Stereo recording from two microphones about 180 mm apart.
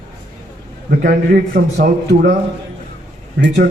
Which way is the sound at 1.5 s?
50° right (ahead or behind).